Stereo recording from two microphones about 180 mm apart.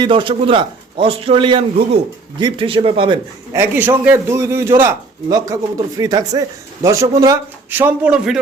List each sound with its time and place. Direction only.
0.0 s a man's voice: 30° right (ahead or behind)
3.5 s a man's voice: 10° right (ahead or behind)